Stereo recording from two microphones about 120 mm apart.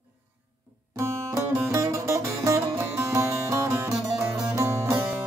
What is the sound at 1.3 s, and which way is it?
Music, 25° right (ahead or behind).